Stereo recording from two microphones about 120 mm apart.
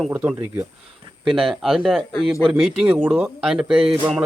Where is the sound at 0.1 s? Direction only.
10° right (ahead or behind).